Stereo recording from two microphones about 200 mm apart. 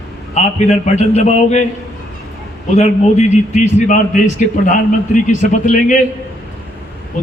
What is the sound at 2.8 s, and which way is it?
A man's voice, 35° left (ahead or behind).